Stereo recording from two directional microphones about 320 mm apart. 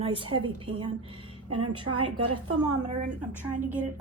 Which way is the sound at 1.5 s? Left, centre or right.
Right.